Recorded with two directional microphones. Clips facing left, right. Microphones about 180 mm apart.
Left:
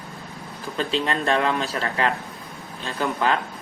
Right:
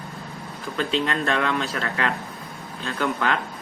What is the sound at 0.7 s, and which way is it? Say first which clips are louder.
Speech: even; 35° left (ahead or behind).